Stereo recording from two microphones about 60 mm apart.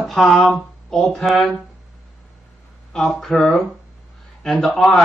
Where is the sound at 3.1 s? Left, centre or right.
Centre.